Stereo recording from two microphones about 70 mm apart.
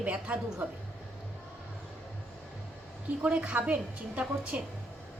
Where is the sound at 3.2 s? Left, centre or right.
Centre.